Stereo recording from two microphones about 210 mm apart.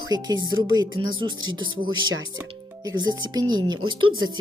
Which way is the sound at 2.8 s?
20° right (ahead or behind).